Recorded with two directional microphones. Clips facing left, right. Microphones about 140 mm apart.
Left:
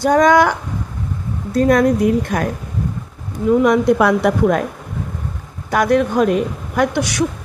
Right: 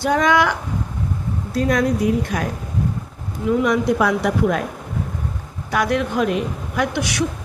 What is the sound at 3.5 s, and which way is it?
A woman's voice, 50° left (ahead or behind).